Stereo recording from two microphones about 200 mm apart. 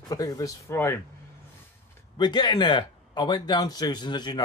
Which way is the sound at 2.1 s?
20° left (ahead or behind).